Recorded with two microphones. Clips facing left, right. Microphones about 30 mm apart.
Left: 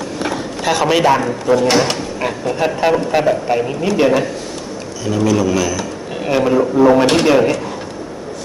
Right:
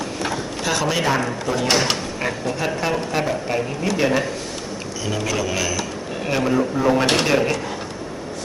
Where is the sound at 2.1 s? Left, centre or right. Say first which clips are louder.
Left 4 dB; centre.